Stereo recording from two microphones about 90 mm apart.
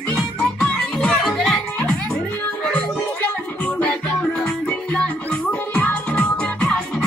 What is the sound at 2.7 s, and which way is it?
Music, 15° left (ahead or behind).